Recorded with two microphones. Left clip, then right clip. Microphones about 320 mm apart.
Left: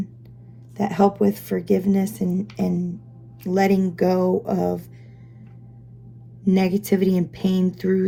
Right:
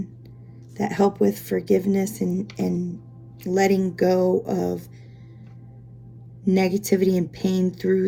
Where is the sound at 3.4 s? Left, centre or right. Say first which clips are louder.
Even; left.